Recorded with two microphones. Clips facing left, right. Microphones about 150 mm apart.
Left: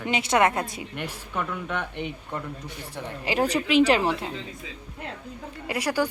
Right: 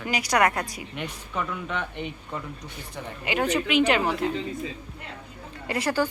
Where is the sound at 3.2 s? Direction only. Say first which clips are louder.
Left 1 dB; 35° left (ahead or behind).